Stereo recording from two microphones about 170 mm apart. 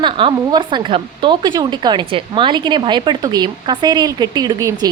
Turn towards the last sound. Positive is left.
turn(degrees=-20)  # may be behind; listen again after turning